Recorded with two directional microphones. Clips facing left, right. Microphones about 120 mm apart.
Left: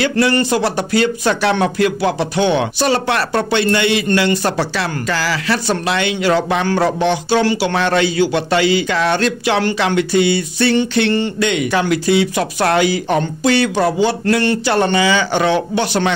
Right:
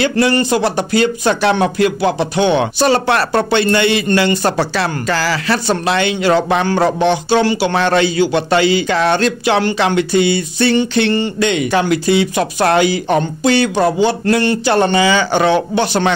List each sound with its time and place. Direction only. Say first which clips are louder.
0.0 s speech: right 1 dB; 20° right (ahead or behind)
2.6 s a man's voice: right 3 dB; 35° right (ahead or behind)